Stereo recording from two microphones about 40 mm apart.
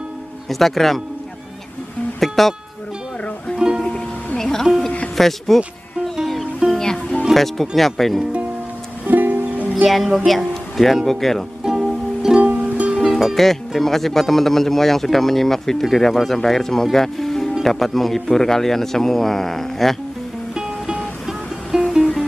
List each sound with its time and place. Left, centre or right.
0.5 s speech: centre
2.1 s music: centre
3.5 s music: centre
4.4 s music: centre
5.1 s speech: centre
6.7 s music: centre
7.3 s speech: centre
9.0 s music: right
9.8 s speech: centre
11.6 s music: centre
12.4 s music: right
13.0 s speech: centre
20.5 s music: centre